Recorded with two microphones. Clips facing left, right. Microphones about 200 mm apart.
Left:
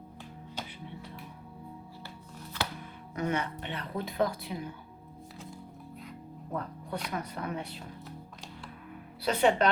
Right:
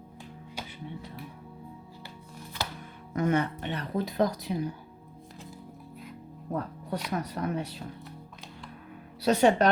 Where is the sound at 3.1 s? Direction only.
45° right (ahead or behind).